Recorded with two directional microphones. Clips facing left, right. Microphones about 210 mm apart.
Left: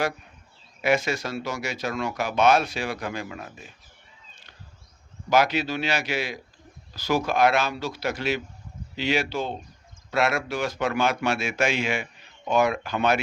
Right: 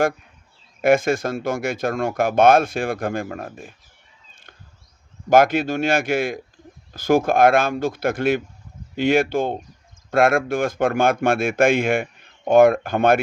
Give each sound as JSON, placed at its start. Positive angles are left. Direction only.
{"t": 0.8, "sound": "speech", "side_deg": -50}
{"t": 5.3, "sound": "speech", "side_deg": -50}